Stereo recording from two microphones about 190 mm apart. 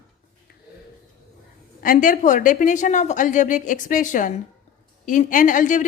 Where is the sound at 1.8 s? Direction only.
45° left (ahead or behind).